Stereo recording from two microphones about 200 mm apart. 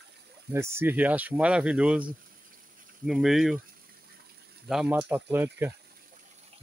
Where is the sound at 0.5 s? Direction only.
10° right (ahead or behind).